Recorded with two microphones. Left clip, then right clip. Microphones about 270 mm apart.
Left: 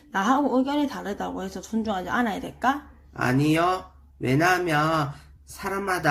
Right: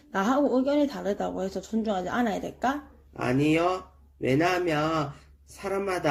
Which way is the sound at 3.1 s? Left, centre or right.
Left.